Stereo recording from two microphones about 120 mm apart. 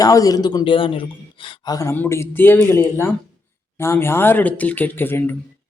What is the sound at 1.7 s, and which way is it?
Speech, 25° left (ahead or behind).